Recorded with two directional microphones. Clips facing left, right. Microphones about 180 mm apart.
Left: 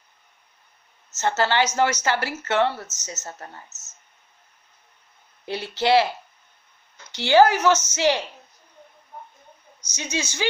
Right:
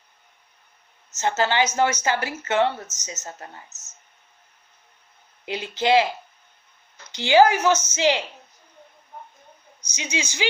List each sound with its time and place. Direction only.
1.1 s a woman's voice: 15° right (ahead or behind)
5.5 s a woman's voice: 15° right (ahead or behind)
7.1 s a woman's voice: 15° right (ahead or behind)
9.8 s a woman's voice: 15° right (ahead or behind)